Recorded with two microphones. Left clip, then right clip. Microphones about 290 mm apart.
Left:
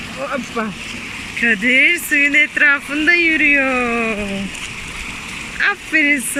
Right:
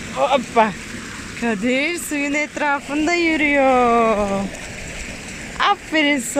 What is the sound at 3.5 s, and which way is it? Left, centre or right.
Speech, right.